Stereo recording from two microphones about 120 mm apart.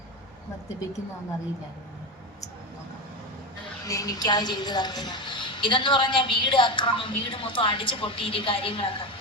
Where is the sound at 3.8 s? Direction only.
30° left (ahead or behind).